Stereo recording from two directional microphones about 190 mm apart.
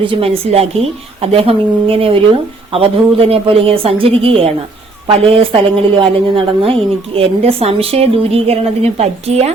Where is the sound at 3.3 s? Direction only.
30° right (ahead or behind).